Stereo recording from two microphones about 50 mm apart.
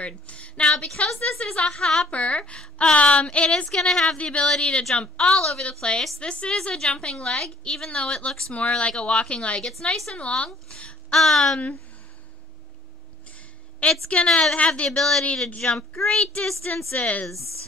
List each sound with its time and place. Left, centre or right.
0.0 s a woman's voice: left
4.2 s a woman's voice: left
5.3 s a woman's voice: centre
5.6 s a woman's voice: left
8.3 s a woman's voice: centre
8.5 s a woman's voice: left
9.7 s a woman's voice: centre
10.1 s a woman's voice: left
11.1 s a woman's voice: centre
13.8 s a woman's voice: centre
14.5 s a woman's voice: left
14.9 s a woman's voice: centre
15.2 s a woman's voice: left
16.9 s a woman's voice: left